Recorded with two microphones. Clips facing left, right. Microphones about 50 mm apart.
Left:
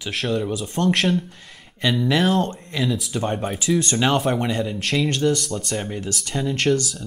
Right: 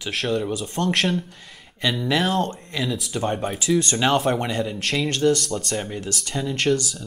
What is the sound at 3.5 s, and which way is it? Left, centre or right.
Speech, left.